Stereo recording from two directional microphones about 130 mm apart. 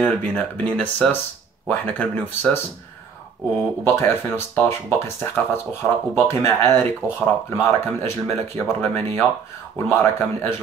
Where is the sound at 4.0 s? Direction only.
20° left (ahead or behind).